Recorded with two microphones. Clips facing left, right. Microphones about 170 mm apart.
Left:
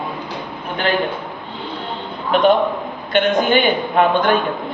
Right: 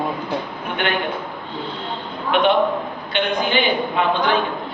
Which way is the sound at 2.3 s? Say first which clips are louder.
Left 2 dB; 40° left (ahead or behind).